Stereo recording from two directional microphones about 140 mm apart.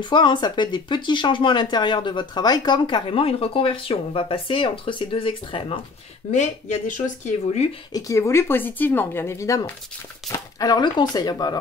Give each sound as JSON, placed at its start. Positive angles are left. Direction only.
{"t": 0.0, "sound": "speech", "side_deg": 35}
{"t": 6.3, "sound": "speech", "side_deg": 55}
{"t": 7.9, "sound": "speech", "side_deg": 20}